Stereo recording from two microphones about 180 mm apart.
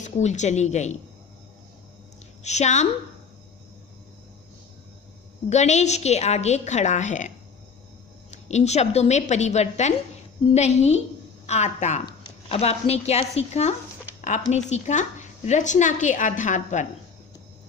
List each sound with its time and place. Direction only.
0.0 s a woman's voice: 40° left (ahead or behind)
2.4 s a woman's voice: 40° left (ahead or behind)
5.5 s a woman's voice: 40° left (ahead or behind)